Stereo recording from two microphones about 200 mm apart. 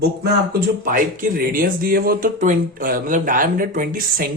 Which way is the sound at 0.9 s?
45° right (ahead or behind).